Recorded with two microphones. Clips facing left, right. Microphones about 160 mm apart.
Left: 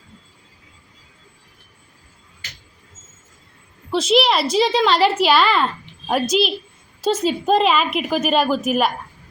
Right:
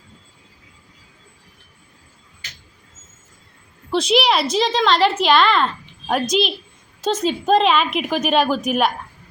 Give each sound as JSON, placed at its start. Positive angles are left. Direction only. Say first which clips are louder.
{"t": 3.9, "sound": "a woman's voice", "louder": "left 1 dB", "side_deg": 0}